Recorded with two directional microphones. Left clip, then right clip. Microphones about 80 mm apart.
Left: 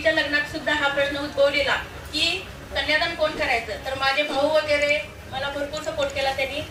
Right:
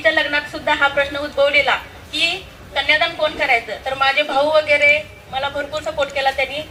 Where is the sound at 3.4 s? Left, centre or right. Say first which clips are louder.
Right 6 dB; right.